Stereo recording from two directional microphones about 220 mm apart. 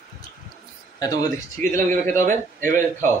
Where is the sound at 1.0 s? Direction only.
15° left (ahead or behind).